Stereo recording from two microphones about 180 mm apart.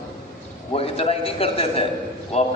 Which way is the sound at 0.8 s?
30° left (ahead or behind).